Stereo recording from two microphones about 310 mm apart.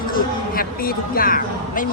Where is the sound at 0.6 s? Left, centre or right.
Left.